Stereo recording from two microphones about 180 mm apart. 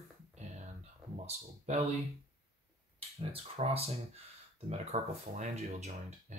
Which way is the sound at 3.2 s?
35° right (ahead or behind).